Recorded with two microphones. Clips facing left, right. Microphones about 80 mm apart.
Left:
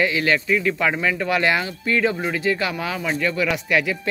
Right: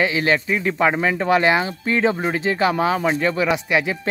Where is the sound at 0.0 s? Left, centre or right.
Right.